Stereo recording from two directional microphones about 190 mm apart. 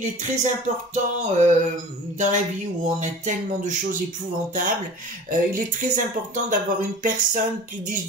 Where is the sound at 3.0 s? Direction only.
40° right (ahead or behind).